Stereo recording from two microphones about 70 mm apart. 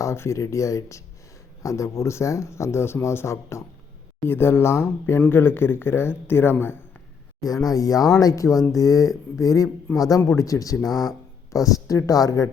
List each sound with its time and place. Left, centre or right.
0.0 s speech: left
7.4 s speech: left
9.9 s speech: left
10.2 s speech: left